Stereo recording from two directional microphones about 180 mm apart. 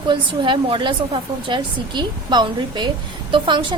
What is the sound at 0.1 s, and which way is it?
A woman's voice, 25° right (ahead or behind).